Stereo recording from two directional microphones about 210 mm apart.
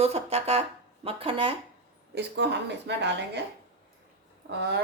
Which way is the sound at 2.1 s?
55° right (ahead or behind).